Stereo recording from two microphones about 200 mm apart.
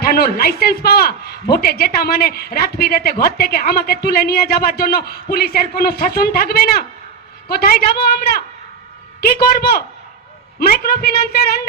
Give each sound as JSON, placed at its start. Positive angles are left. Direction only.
{"t": 0.0, "sound": "speech", "side_deg": 50}